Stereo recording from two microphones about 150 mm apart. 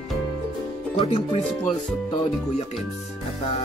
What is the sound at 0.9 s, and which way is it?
Speech, 40° left (ahead or behind).